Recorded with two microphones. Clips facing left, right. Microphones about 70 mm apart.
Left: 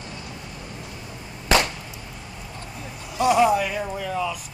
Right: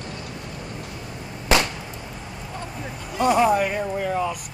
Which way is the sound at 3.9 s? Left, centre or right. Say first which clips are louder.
Right 3 dB; right.